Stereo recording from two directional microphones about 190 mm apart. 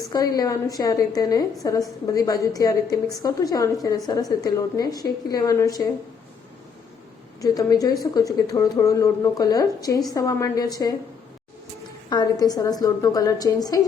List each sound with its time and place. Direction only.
0.1 s a woman's voice: 20° left (ahead or behind)
7.4 s a woman's voice: 20° left (ahead or behind)
12.0 s a woman's voice: 20° left (ahead or behind)